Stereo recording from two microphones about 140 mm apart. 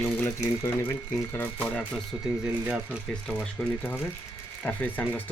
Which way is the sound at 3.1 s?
5° left (ahead or behind).